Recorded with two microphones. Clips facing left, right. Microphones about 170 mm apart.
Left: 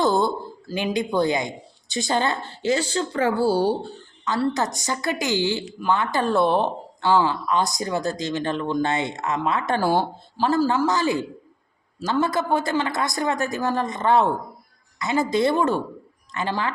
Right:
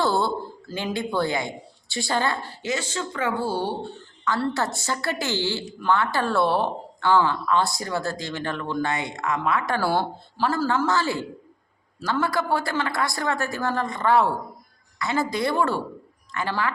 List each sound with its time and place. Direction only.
0.0 s a man's voice: 15° left (ahead or behind); by 3.9 s 35° left (ahead or behind)
4.3 s a woman's voice: 15° left (ahead or behind)